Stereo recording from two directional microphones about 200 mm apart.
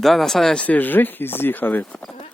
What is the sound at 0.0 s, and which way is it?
Speech, centre (ahead or behind).